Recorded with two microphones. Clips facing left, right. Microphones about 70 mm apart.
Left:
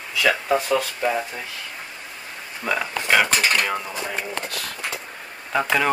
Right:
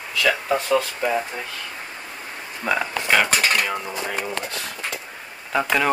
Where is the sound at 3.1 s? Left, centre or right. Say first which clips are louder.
Even; centre.